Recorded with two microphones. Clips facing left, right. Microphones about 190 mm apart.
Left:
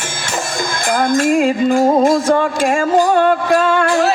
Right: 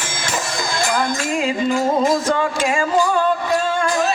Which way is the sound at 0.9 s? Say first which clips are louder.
Left 10 dB; 55° left (ahead or behind).